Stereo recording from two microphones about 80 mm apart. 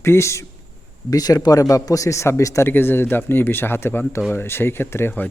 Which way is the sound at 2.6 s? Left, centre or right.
Left.